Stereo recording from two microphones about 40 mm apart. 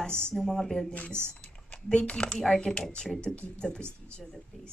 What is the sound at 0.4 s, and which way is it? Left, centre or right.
Speech, centre.